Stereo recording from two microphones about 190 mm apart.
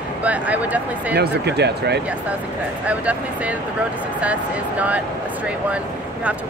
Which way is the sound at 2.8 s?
5° right (ahead or behind).